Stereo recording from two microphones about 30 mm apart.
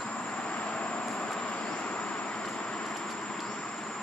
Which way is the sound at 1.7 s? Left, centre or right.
Left.